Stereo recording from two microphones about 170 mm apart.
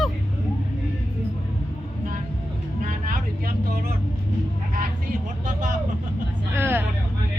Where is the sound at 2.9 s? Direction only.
55° right (ahead or behind).